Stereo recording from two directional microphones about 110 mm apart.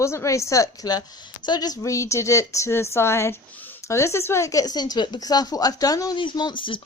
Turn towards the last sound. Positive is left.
turn(degrees=50)  # may be behind; listen again after turning